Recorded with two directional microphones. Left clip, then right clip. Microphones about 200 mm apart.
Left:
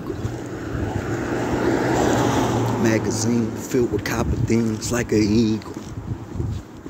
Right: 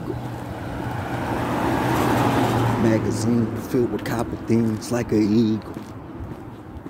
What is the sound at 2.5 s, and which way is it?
Vehicle, 25° left (ahead or behind).